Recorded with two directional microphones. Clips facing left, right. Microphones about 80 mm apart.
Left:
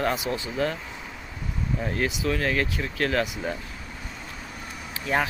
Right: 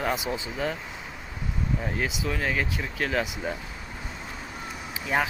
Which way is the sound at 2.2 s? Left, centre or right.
Centre.